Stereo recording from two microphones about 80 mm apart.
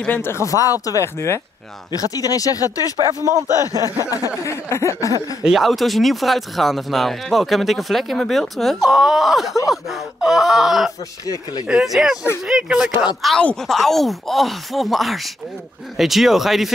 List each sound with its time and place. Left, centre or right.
0.0 s speech: left
0.5 s speech: left
0.8 s a sound: left
1.9 s speech: left
3.3 s speech: right
4.0 s speech: left
4.4 s a sound: left
5.4 s speech: centre
13.6 s speech: centre